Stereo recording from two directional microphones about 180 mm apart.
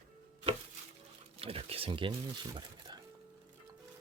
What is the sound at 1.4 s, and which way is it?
Speech, 30° right (ahead or behind).